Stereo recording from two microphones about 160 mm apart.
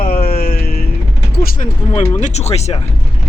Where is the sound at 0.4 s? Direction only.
75° left (ahead or behind).